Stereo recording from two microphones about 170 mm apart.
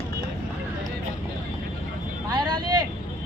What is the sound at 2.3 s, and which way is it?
Vehicle, 25° right (ahead or behind).